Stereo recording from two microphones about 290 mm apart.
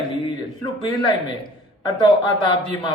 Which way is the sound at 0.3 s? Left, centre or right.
Centre.